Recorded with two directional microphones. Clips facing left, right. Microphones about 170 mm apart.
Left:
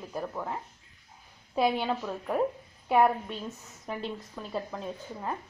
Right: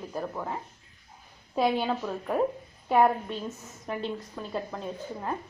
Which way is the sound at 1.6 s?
Centre (ahead or behind).